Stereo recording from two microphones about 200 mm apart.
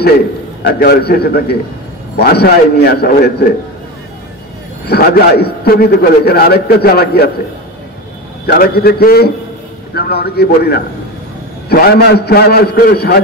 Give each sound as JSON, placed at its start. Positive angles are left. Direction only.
{"t": 0.7, "sound": "a man's voice", "side_deg": 50}
{"t": 4.8, "sound": "a man's voice", "side_deg": 50}
{"t": 8.5, "sound": "a man's voice", "side_deg": 50}